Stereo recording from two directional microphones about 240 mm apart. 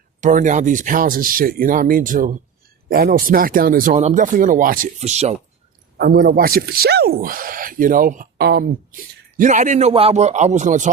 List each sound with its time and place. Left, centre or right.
0.2 s speech: right
6.0 s speech: right